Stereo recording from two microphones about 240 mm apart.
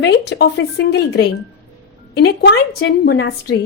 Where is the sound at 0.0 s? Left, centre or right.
Left.